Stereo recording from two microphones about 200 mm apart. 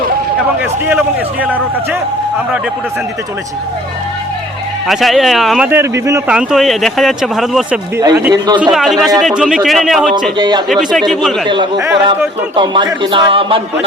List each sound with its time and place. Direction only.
0.3 s speech: centre (ahead or behind)
4.9 s speech: centre (ahead or behind)
6.3 s speech: centre (ahead or behind)
7.9 s a man's voice: 15° right (ahead or behind)
8.7 s speech: centre (ahead or behind)
10.3 s a man's voice: 20° right (ahead or behind)
10.9 s speech: centre (ahead or behind)
11.4 s a man's voice: 25° right (ahead or behind)